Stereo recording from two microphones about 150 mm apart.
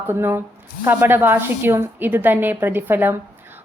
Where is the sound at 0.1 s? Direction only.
15° right (ahead or behind).